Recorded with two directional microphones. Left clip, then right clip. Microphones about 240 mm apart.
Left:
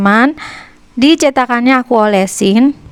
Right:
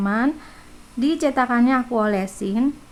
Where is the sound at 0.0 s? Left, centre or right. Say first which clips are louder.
Left 12 dB; left.